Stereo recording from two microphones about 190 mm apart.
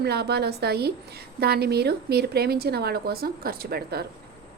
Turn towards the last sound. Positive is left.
turn(degrees=-55)  # may be behind; listen again after turning